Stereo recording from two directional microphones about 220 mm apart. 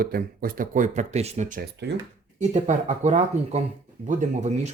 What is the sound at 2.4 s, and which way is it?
Speech, 35° right (ahead or behind).